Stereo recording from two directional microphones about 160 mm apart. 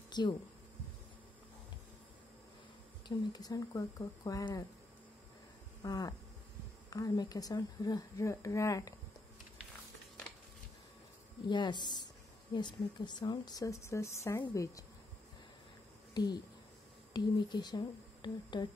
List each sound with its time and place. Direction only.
0.1 s speech: 25° left (ahead or behind)
3.1 s speech: 25° left (ahead or behind)
5.8 s insect: 25° left (ahead or behind)
6.9 s speech: 25° left (ahead or behind)
11.4 s speech: 30° left (ahead or behind)
16.1 s speech: 25° left (ahead or behind)